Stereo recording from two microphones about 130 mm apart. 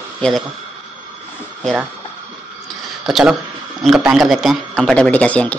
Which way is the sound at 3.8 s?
5° right (ahead or behind).